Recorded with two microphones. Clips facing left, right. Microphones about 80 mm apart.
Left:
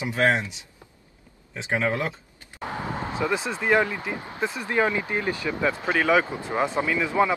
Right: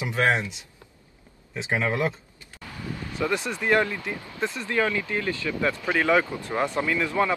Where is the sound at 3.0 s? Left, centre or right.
Left.